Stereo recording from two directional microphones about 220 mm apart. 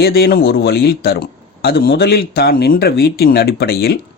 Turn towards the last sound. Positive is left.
turn(degrees=45)  # may be behind; listen again after turning